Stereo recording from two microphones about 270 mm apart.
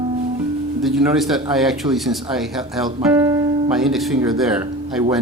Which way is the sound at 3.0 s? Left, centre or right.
Centre.